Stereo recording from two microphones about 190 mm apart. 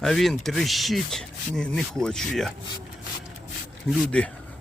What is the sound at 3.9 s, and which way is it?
Speech, 5° left (ahead or behind).